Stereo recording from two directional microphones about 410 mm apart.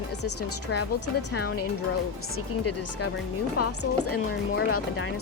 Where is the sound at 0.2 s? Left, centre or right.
Left.